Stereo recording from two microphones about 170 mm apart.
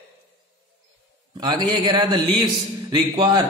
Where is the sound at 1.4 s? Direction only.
25° right (ahead or behind).